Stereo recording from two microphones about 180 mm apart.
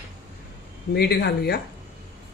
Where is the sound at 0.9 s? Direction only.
65° left (ahead or behind).